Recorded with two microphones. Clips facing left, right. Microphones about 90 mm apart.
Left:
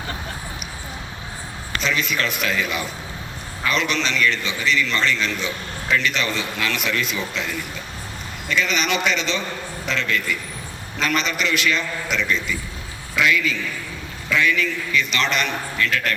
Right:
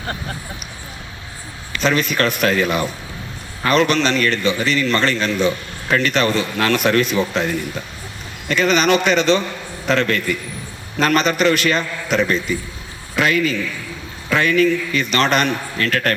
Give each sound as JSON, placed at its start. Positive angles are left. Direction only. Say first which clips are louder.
{"t": 1.8, "sound": "a man's voice", "louder": "right 6 dB", "side_deg": -45}